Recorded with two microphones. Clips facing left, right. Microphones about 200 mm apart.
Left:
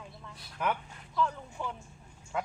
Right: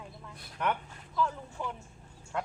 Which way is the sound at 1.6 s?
5° right (ahead or behind).